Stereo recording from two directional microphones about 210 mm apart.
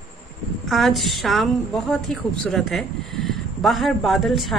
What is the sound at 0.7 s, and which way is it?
Speech, centre (ahead or behind).